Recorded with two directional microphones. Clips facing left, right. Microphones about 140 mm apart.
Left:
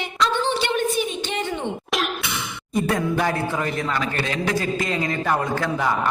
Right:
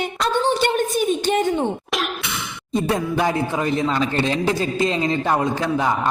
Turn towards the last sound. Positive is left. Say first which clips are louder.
# right 2 dB
turn(degrees=-20)  # may be behind; listen again after turning